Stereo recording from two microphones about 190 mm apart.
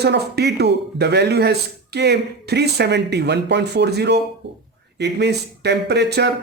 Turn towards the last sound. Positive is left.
turn(degrees=-60)  # may be behind; listen again after turning